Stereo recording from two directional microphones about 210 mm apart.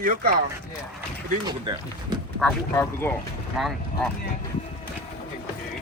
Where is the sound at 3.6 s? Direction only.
Centre (ahead or behind).